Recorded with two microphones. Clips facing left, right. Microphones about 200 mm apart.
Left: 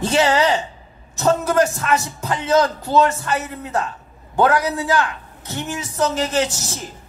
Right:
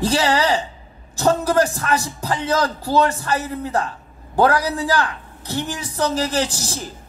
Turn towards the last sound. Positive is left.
turn(degrees=-35)  # may be behind; listen again after turning